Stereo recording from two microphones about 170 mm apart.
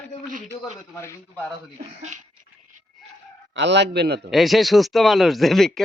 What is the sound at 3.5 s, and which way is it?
Speech, 90° right.